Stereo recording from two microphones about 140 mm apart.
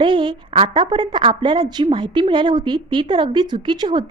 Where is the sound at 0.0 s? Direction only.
35° right (ahead or behind).